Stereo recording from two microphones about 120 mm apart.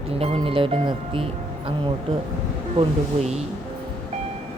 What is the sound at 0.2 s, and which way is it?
Speech, 50° right (ahead or behind).